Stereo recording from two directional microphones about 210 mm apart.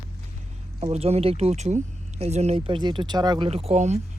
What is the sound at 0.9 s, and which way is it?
Speech, 30° right (ahead or behind).